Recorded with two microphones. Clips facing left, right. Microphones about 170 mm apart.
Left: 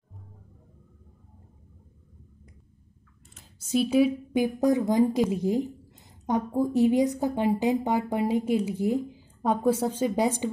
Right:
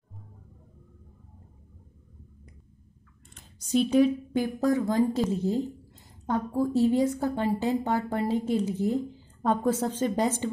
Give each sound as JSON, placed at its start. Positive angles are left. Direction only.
{"t": 3.3, "sound": "speech", "side_deg": 5}